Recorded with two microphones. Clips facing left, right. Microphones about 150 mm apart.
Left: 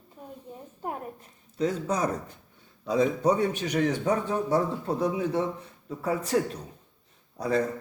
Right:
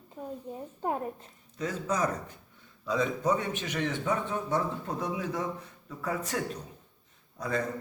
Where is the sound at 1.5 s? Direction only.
30° left (ahead or behind).